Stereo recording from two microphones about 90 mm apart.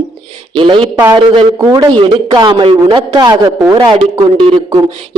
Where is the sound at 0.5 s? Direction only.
65° right (ahead or behind); by 3.5 s 50° right (ahead or behind).